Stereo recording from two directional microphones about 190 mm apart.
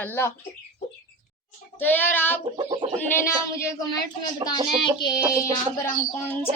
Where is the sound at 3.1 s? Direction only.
15° left (ahead or behind).